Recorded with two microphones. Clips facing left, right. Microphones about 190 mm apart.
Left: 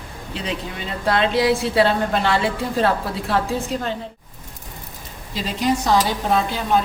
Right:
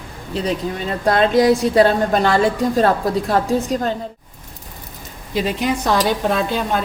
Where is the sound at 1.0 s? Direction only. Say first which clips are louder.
Right 4 dB; 45° right (ahead or behind).